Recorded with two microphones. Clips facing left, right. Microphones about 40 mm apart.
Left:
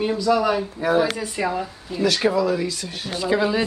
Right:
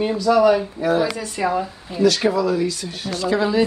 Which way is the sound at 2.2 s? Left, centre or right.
Centre.